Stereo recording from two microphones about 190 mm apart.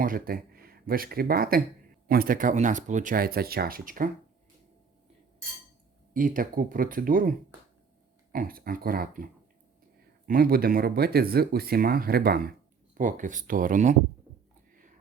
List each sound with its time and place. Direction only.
0.0 s speech: 50° right (ahead or behind)
6.1 s speech: 45° right (ahead or behind)
10.2 s speech: 50° right (ahead or behind)